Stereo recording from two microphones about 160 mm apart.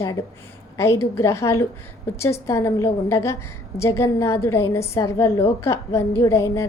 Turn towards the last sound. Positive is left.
turn(degrees=20)  # may be behind; listen again after turning